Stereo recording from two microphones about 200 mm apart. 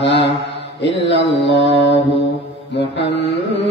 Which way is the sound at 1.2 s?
60° left (ahead or behind).